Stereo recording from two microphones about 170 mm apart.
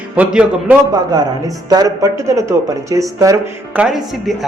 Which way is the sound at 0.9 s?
20° right (ahead or behind).